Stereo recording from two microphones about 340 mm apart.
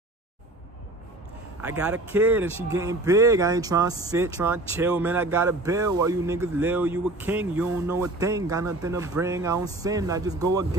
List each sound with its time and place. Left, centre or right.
1.6 s speech: centre